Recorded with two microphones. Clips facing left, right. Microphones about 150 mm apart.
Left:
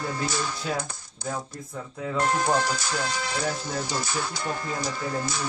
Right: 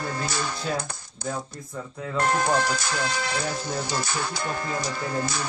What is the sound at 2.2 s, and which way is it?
Speech, 65° right (ahead or behind).